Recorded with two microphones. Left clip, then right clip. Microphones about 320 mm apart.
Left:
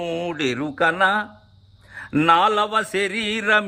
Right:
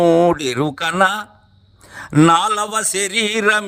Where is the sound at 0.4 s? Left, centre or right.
Right.